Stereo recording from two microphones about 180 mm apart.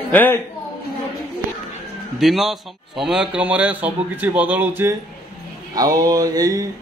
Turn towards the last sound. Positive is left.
turn(degrees=-20)  # may be behind; listen again after turning